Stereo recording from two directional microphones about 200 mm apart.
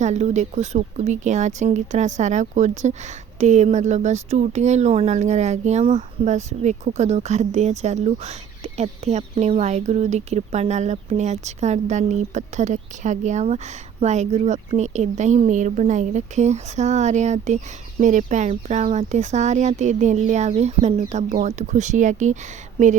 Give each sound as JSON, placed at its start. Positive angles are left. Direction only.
{"t": 0.0, "sound": "speech", "side_deg": -35}